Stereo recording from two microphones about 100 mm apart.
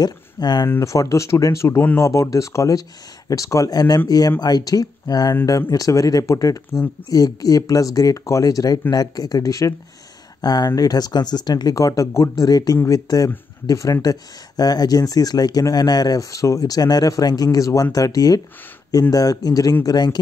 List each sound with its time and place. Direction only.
0.0 s speech: 45° left (ahead or behind)
0.7 s a man's voice: 30° left (ahead or behind)